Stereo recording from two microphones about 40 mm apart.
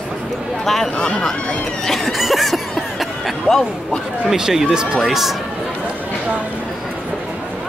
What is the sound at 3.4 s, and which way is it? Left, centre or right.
Speech, centre.